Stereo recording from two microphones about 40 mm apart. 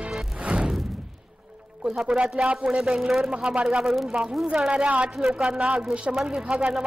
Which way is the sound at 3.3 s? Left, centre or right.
Right.